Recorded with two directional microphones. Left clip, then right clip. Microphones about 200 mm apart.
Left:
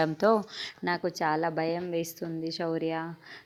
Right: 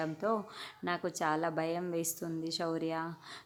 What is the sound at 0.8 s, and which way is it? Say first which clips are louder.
Speech: left 5 dB; 20° left (ahead or behind).